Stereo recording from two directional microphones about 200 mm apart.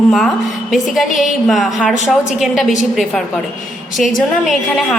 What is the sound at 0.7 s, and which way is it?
A woman's voice, centre (ahead or behind).